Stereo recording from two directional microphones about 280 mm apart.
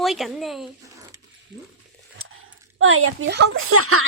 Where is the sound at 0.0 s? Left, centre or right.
Centre.